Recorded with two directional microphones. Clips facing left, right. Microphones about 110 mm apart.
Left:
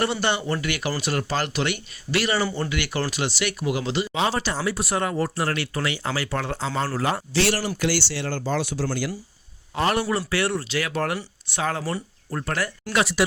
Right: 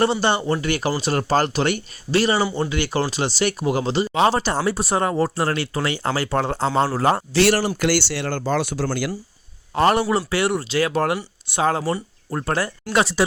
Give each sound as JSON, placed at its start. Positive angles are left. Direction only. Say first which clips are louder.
{"t": 0.0, "sound": "speech", "louder": "right 5 dB", "side_deg": -30}
{"t": 4.1, "sound": "speech", "louder": "right 8 dB", "side_deg": -50}
{"t": 4.6, "sound": "speech", "louder": "right 4 dB", "side_deg": -35}
{"t": 9.9, "sound": "a man's voice", "louder": "right 4 dB", "side_deg": -20}